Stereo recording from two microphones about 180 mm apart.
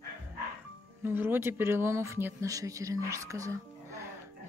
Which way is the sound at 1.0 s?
10° right (ahead or behind).